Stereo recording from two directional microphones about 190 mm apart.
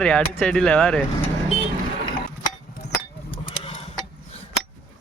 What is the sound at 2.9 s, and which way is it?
Sheep, 25° left (ahead or behind).